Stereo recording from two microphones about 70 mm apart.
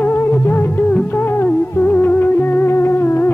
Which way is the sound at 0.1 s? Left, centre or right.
Left.